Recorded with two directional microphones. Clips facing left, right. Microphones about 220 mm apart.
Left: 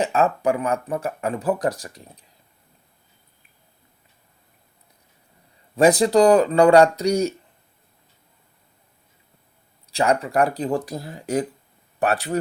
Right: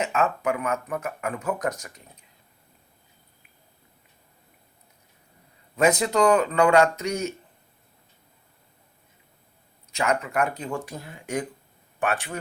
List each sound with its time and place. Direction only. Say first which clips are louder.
0.0 s speech: left 5 dB; 35° left (ahead or behind)
5.7 s speech: left 6 dB; 35° left (ahead or behind)
9.9 s speech: left 5 dB; 35° left (ahead or behind)